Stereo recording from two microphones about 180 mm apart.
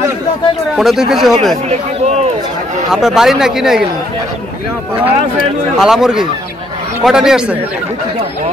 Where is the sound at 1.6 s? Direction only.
40° right (ahead or behind).